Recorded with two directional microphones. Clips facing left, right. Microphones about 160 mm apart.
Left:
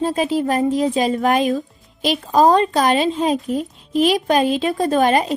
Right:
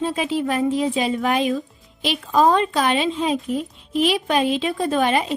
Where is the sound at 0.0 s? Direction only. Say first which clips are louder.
Left 3 dB; 40° left (ahead or behind).